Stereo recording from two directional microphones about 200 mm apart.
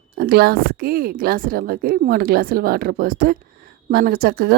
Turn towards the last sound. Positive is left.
turn(degrees=-50)  # may be behind; listen again after turning